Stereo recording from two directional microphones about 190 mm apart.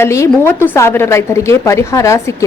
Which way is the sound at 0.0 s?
15° left (ahead or behind).